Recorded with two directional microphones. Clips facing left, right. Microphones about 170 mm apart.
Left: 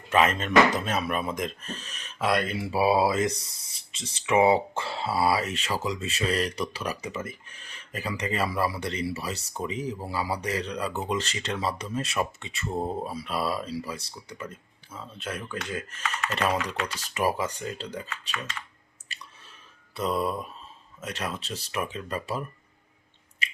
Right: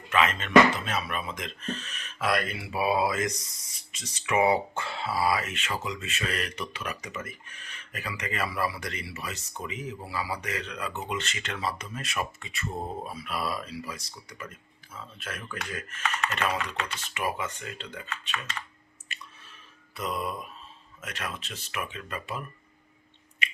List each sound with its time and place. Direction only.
0.1 s speech: 40° left (ahead or behind)
2.1 s speech: 25° left (ahead or behind)
20.0 s speech: 30° left (ahead or behind)